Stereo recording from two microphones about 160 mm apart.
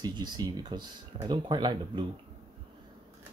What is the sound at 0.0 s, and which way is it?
Speech, 25° right (ahead or behind).